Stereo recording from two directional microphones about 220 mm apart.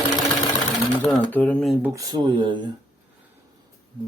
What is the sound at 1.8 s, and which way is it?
Speech, 15° right (ahead or behind).